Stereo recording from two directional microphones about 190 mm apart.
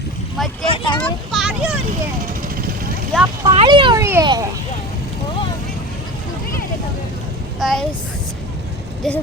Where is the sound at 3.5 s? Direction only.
25° right (ahead or behind).